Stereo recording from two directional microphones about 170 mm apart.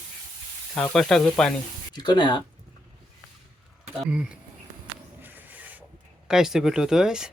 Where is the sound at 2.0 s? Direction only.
25° left (ahead or behind).